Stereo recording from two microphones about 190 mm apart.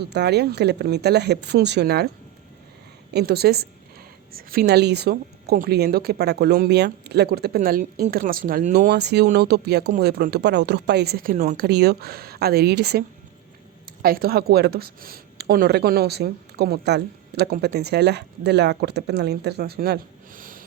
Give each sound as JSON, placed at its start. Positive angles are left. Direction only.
{"t": 0.0, "sound": "speech", "side_deg": -60}
{"t": 3.1, "sound": "speech", "side_deg": -60}
{"t": 8.9, "sound": "speech", "side_deg": -60}